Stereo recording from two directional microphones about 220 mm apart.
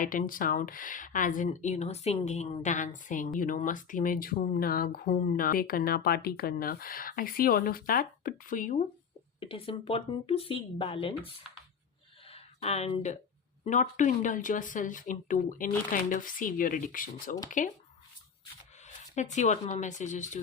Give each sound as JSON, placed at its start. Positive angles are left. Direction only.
{"t": 0.0, "sound": "a woman's voice", "side_deg": 40}
{"t": 9.4, "sound": "speech", "side_deg": 25}
{"t": 12.3, "sound": "a sound", "side_deg": 30}
{"t": 13.7, "sound": "a woman's voice", "side_deg": 35}
{"t": 19.1, "sound": "a woman's voice", "side_deg": 35}